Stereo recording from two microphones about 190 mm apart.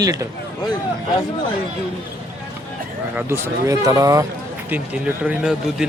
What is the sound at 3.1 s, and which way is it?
A man's voice, 10° right (ahead or behind).